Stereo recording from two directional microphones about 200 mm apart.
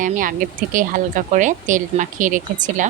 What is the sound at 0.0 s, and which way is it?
Speech, 40° right (ahead or behind).